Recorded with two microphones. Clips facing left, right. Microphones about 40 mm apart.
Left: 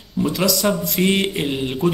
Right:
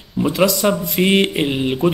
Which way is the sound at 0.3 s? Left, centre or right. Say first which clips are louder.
Right 4 dB; centre.